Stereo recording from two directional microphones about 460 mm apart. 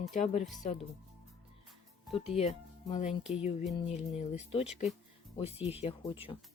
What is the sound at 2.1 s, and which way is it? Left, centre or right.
Speech, centre.